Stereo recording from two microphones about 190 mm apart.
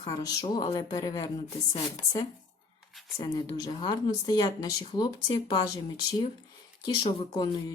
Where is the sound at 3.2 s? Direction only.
20° left (ahead or behind).